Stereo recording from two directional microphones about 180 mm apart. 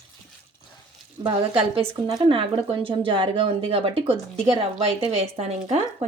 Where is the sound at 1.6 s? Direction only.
30° right (ahead or behind).